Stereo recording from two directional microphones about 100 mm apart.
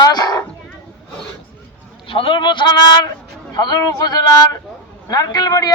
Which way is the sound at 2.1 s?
60° left (ahead or behind).